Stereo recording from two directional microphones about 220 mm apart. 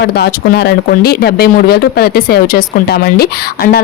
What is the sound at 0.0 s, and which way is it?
Speech, 50° left (ahead or behind).